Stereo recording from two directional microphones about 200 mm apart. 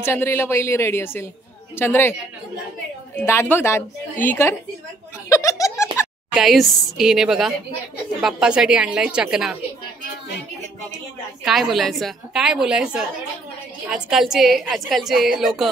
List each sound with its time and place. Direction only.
0.0 s a woman's voice: 10° left (ahead or behind)
3.2 s a woman's voice: 10° left (ahead or behind)
5.3 s giggle: 15° left (ahead or behind)
6.3 s a woman's voice: centre (ahead or behind)
11.4 s a woman's voice: centre (ahead or behind)